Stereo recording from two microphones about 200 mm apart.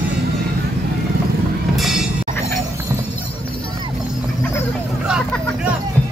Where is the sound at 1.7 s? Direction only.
Centre (ahead or behind).